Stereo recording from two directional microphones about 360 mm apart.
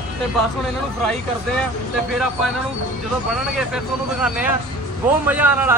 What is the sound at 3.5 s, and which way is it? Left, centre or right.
A man's voice, centre.